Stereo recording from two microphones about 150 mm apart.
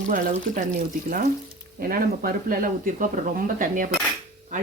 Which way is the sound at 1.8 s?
80° right.